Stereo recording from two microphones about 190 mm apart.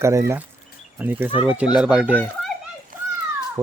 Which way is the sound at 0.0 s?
15° right (ahead or behind).